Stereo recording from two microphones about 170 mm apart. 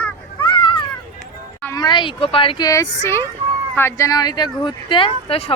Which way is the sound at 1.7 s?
25° left (ahead or behind).